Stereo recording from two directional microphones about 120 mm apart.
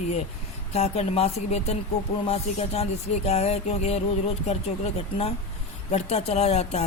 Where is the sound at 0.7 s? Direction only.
60° left (ahead or behind).